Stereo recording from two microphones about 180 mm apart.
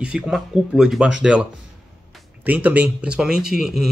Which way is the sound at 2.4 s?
10° right (ahead or behind).